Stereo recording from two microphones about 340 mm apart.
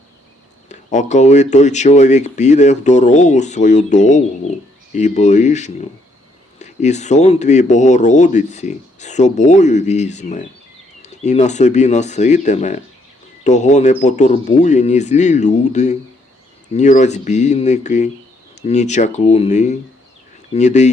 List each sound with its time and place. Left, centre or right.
0.7 s speech: left